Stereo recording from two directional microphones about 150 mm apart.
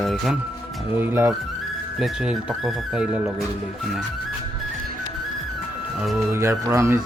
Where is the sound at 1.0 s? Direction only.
15° right (ahead or behind).